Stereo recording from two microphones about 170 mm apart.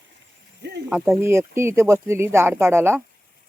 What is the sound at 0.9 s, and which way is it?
Speech, 5° right (ahead or behind).